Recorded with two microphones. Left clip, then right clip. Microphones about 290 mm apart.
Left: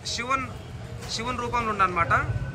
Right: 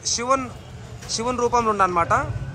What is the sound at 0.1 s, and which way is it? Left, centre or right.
A man's voice, centre.